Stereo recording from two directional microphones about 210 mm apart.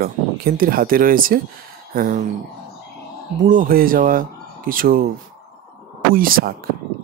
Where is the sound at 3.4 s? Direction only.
40° right (ahead or behind).